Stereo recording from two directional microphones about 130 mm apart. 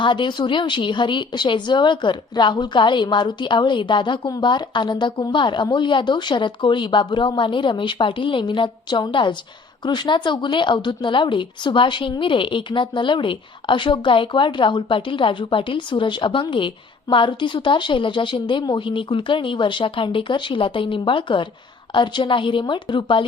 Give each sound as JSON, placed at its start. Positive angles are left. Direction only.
{"t": 0.0, "sound": "a woman's voice", "side_deg": 35}